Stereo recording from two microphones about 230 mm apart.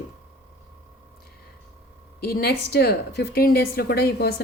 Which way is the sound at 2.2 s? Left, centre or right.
Left.